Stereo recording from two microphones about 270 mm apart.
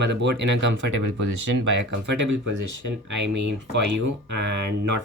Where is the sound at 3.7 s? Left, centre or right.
Right.